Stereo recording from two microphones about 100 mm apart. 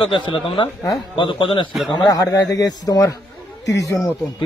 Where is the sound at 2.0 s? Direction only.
40° left (ahead or behind).